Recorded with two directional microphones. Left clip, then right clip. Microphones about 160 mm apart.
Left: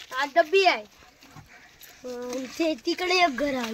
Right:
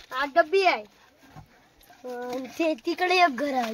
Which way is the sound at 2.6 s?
45° right (ahead or behind).